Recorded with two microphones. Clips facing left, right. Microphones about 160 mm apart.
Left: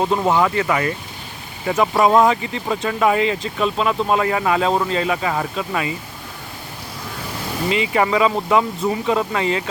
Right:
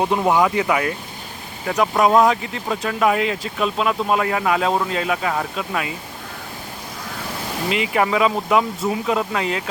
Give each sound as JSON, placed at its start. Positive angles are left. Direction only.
{"t": 0.0, "sound": "speech", "side_deg": -10}
{"t": 7.7, "sound": "speech", "side_deg": 0}